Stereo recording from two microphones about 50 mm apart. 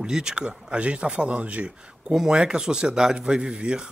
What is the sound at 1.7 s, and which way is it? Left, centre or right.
A man's voice, centre.